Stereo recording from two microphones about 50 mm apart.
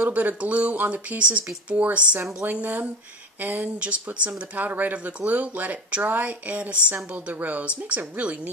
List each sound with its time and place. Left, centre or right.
0.1 s a woman's voice: right
3.6 s a woman's voice: right
4.3 s a woman's voice: right